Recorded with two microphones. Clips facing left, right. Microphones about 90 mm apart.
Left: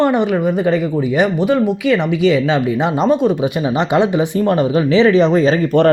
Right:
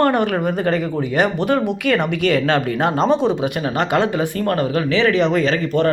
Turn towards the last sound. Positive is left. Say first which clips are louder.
# left 5 dB
turn(degrees=35)  # may be behind; listen again after turning